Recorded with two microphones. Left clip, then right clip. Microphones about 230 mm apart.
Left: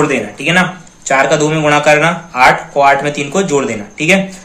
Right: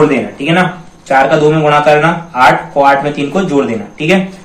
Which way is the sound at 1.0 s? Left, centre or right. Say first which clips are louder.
Right 3 dB; left.